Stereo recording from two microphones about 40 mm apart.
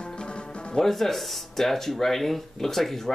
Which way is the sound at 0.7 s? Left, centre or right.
Centre.